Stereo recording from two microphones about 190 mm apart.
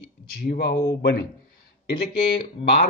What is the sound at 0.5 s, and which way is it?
Speech, 60° left (ahead or behind).